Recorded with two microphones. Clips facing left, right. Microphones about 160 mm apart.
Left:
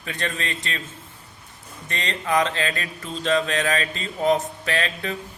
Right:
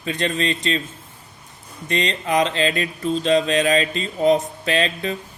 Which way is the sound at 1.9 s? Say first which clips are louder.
Right 3 dB; 20° right (ahead or behind).